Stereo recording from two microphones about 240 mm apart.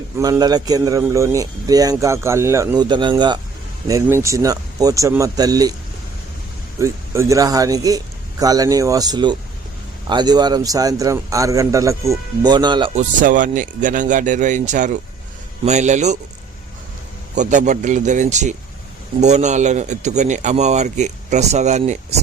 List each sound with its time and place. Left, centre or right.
0.2 s a man's voice: centre
6.7 s a man's voice: centre; by 16.1 s right
17.3 s speech: right